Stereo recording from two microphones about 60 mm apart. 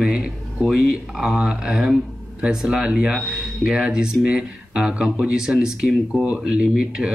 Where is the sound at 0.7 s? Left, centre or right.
Centre.